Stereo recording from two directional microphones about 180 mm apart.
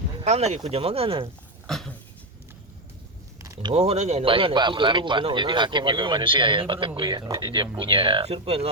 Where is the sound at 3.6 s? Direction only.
35° right (ahead or behind).